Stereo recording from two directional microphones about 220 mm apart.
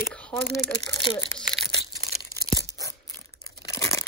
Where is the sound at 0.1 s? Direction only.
5° left (ahead or behind).